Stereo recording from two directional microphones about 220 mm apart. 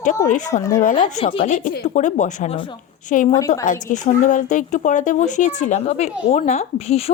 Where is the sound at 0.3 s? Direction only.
35° left (ahead or behind).